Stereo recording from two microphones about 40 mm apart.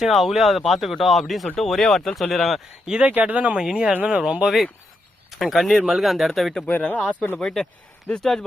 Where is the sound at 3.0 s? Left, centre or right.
Right.